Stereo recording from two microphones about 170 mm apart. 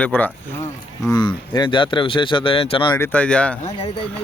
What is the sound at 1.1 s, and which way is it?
Speech, 25° left (ahead or behind).